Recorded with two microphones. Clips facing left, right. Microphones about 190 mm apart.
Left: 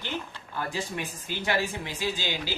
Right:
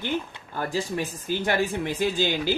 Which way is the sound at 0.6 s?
40° right (ahead or behind).